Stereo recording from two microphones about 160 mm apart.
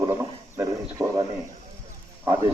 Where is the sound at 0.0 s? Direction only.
15° right (ahead or behind).